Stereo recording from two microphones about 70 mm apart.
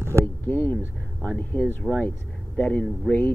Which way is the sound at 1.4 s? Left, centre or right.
Left.